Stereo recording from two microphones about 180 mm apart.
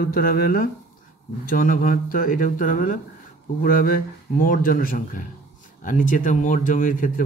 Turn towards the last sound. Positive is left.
turn(degrees=50)  # may be behind; listen again after turning